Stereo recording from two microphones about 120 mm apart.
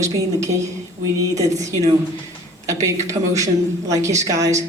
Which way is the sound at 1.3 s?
25° right (ahead or behind).